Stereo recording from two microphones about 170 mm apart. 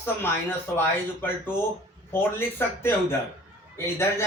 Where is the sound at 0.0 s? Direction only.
15° left (ahead or behind).